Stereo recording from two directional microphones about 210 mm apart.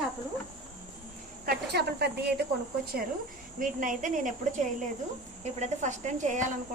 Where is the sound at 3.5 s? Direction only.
40° right (ahead or behind).